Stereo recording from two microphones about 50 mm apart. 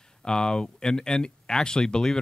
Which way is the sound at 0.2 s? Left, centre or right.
Centre.